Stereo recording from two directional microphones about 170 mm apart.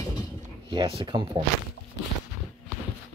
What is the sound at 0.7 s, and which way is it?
Speech, 30° right (ahead or behind).